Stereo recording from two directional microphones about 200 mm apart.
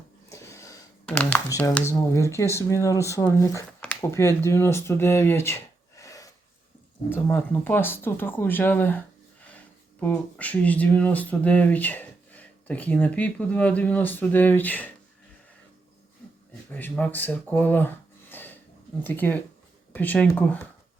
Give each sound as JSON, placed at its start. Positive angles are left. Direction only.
{"t": 0.3, "sound": "a sound", "side_deg": 15}
{"t": 1.1, "sound": "speech", "side_deg": 5}
{"t": 1.5, "sound": "speech", "side_deg": 15}
{"t": 6.0, "sound": "filing", "side_deg": 15}
{"t": 7.1, "sound": "speech", "side_deg": 10}
{"t": 16.6, "sound": "speech", "side_deg": 10}